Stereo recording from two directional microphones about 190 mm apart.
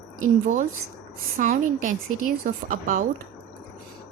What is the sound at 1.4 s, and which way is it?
A woman's voice, 45° right (ahead or behind).